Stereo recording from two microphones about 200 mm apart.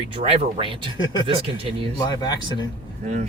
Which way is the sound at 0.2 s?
30° right (ahead or behind).